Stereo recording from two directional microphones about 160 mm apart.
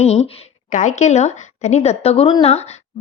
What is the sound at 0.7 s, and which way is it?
A woman's voice, 50° left (ahead or behind).